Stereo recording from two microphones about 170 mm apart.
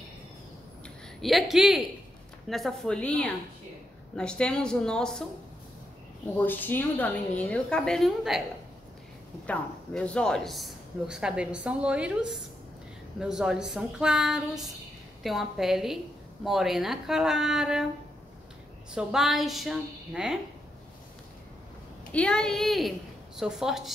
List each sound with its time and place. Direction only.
1.2 s a man's voice: centre (ahead or behind)
6.3 s a woman's voice: 10° left (ahead or behind)
9.5 s a man's voice: 5° left (ahead or behind)
18.9 s a man's voice: centre (ahead or behind)
22.1 s a woman's voice: 5° left (ahead or behind)